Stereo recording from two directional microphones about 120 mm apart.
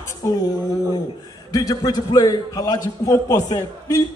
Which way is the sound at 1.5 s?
30° left (ahead or behind).